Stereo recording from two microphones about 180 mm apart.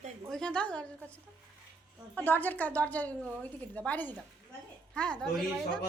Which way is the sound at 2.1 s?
10° left (ahead or behind).